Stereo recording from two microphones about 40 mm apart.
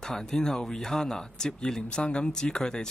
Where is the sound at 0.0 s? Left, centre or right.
Centre.